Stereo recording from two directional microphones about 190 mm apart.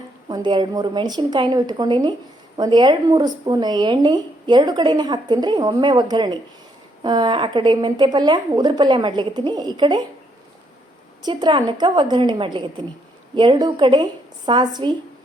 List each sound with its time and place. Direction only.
0.3 s speech: 20° right (ahead or behind)
11.2 s speech: 25° right (ahead or behind)